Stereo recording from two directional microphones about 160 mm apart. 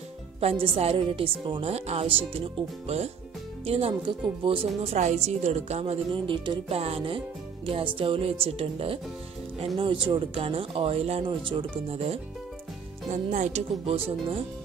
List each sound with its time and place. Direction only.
0.4 s a woman's voice: 40° right (ahead or behind)
4.9 s a woman's voice: 45° right (ahead or behind)
13.1 s speech: 50° right (ahead or behind)